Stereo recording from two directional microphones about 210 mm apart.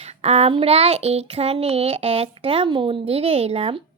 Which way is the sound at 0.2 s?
30° right (ahead or behind).